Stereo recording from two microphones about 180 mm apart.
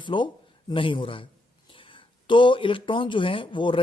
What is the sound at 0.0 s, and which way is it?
A man's voice, 25° left (ahead or behind).